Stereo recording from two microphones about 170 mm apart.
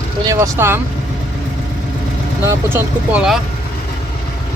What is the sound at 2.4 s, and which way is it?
Speech, 15° right (ahead or behind).